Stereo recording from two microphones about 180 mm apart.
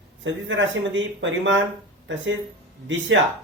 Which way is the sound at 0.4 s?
90° right.